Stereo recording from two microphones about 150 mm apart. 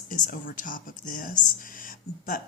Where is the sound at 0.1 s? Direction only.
65° left (ahead or behind).